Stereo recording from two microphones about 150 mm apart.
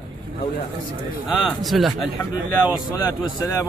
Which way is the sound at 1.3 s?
Centre (ahead or behind).